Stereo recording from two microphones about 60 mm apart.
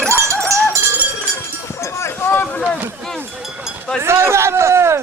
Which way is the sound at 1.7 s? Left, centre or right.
Left.